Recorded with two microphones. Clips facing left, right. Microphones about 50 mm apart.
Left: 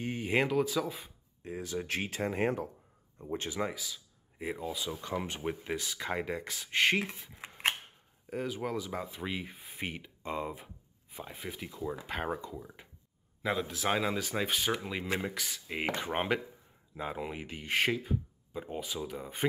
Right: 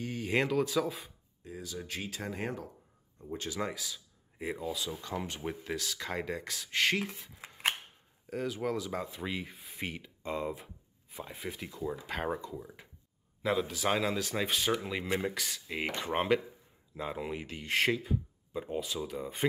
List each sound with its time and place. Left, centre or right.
0.0 s a sound: left
0.3 s speech: centre
1.4 s speech: left
3.5 s speech: centre
7.3 s scissors: centre
8.3 s speech: centre